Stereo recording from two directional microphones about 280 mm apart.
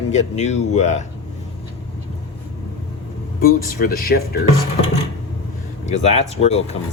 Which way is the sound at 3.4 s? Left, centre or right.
Left.